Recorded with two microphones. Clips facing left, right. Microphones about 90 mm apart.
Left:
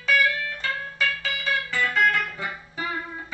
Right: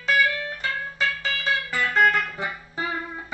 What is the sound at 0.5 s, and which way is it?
Music, 30° right (ahead or behind).